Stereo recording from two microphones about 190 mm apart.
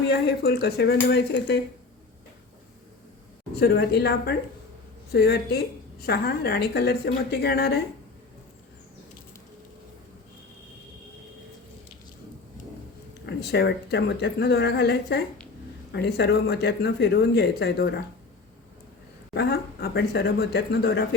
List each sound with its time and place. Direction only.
0.0 s a woman's voice: 60° left (ahead or behind)
3.5 s a woman's voice: 55° left (ahead or behind)
13.2 s a woman's voice: 60° left (ahead or behind)
19.3 s a woman's voice: 60° left (ahead or behind)